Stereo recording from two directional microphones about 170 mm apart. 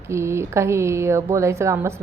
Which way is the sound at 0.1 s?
15° right (ahead or behind).